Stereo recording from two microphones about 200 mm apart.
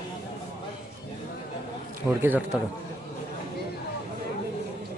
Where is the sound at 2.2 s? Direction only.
10° right (ahead or behind).